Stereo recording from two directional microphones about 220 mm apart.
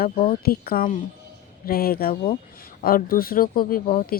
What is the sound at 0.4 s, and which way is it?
Speech, 45° left (ahead or behind).